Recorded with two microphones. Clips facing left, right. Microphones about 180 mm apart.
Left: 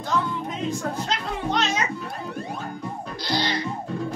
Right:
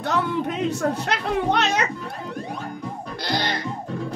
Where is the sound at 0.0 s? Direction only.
70° right (ahead or behind).